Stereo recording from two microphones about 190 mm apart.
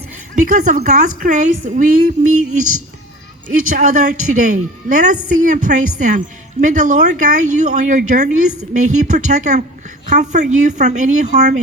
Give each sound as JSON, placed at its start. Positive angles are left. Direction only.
{"t": 0.3, "sound": "a woman's voice", "side_deg": -45}